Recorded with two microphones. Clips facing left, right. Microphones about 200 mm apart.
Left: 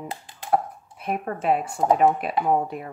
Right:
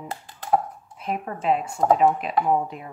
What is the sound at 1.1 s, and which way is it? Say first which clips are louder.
Speech: left 1 dB; 50° left (ahead or behind).